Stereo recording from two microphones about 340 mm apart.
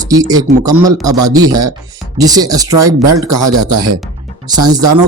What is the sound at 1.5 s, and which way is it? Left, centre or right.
Speech, centre.